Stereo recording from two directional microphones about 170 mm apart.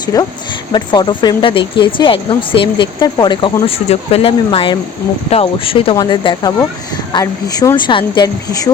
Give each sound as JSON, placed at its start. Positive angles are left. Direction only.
{"t": 0.1, "sound": "speech", "side_deg": 20}